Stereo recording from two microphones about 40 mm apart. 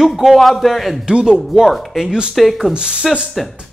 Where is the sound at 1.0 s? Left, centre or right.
Right.